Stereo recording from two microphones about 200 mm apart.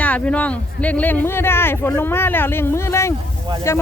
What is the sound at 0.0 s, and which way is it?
Speech, 5° left (ahead or behind).